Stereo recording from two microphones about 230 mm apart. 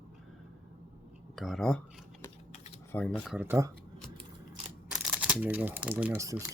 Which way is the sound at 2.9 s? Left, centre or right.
Centre.